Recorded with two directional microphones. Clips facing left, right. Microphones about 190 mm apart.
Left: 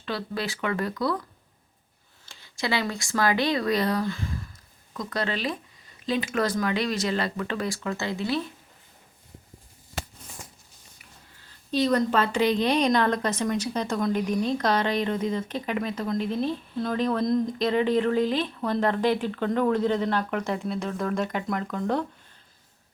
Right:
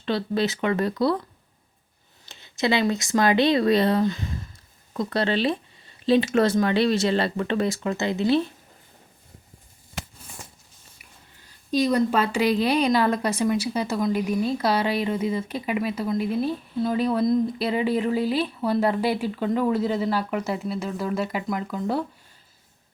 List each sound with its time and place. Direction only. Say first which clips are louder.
0.0 s speech: right 7 dB; 25° right (ahead or behind)
2.2 s speech: right 6 dB; 20° right (ahead or behind)
11.4 s a woman's voice: right 2 dB; 10° right (ahead or behind)